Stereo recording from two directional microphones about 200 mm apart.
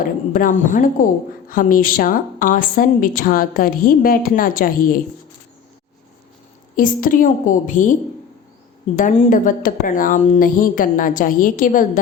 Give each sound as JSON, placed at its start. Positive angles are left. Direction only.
{"t": 0.0, "sound": "a woman's voice", "side_deg": 45}
{"t": 6.7, "sound": "speech", "side_deg": 45}
{"t": 9.0, "sound": "speech", "side_deg": 40}